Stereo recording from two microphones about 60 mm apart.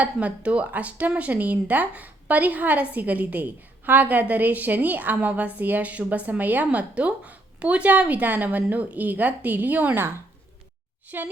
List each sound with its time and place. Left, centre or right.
0.0 s a woman's voice: right
11.1 s a woman's voice: right